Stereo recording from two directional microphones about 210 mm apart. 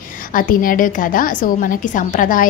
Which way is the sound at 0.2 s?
40° left (ahead or behind).